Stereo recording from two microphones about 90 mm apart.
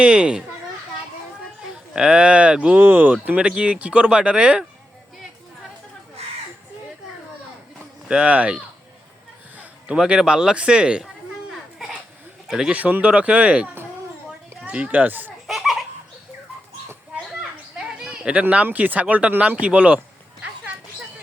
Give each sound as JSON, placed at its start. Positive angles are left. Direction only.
{"t": 0.0, "sound": "speech", "side_deg": -10}
{"t": 1.7, "sound": "speech", "side_deg": -10}
{"t": 8.0, "sound": "speech", "side_deg": -10}
{"t": 12.5, "sound": "speech", "side_deg": -10}
{"t": 15.4, "sound": "laughter", "side_deg": 0}
{"t": 17.7, "sound": "speech", "side_deg": -5}